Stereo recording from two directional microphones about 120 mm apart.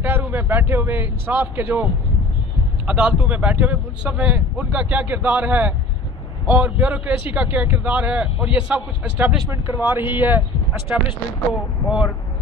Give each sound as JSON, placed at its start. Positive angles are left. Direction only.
{"t": 0.0, "sound": "speech", "side_deg": -15}
{"t": 2.9, "sound": "speech", "side_deg": -10}